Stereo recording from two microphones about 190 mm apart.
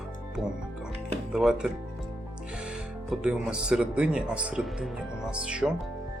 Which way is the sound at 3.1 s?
5° right (ahead or behind).